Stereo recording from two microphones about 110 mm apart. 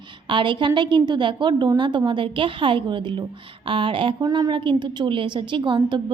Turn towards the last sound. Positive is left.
turn(degrees=-45)  # may be behind; listen again after turning